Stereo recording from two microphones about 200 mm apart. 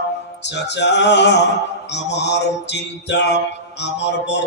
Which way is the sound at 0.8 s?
60° left (ahead or behind).